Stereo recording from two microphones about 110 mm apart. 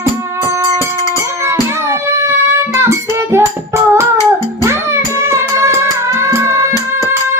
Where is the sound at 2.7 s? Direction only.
25° right (ahead or behind).